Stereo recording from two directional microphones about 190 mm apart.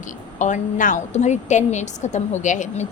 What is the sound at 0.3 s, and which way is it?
A woman's voice, 40° left (ahead or behind).